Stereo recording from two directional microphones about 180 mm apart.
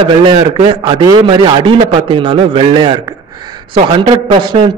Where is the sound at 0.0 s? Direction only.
30° right (ahead or behind).